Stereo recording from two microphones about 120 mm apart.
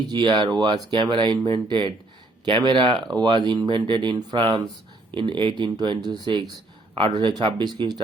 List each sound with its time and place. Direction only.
0.1 s speech: 35° right (ahead or behind)